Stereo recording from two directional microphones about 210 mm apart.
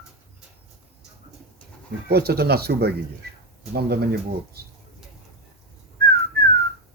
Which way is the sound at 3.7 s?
50° right (ahead or behind).